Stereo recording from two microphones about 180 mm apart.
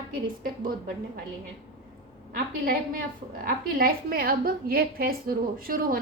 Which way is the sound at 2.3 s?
55° right (ahead or behind).